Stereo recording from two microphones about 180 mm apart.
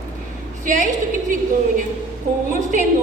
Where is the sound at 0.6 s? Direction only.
45° right (ahead or behind).